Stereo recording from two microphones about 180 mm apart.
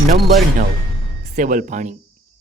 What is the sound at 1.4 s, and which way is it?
Speech, 45° right (ahead or behind).